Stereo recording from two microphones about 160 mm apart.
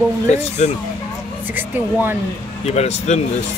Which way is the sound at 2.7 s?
40° left (ahead or behind).